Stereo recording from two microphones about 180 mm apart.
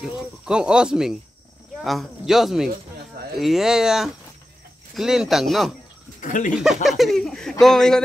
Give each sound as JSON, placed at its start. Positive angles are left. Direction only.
{"t": 0.0, "sound": "speech", "side_deg": -5}
{"t": 6.2, "sound": "speech", "side_deg": 45}
{"t": 6.5, "sound": "speech", "side_deg": 0}